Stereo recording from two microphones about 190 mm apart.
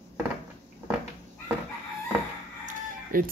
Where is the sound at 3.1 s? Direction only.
50° right (ahead or behind).